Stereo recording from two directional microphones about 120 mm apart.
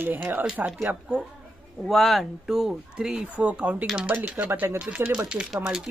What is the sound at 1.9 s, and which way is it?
Speech, centre (ahead or behind).